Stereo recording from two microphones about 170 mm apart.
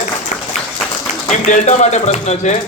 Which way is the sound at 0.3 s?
45° left (ahead or behind).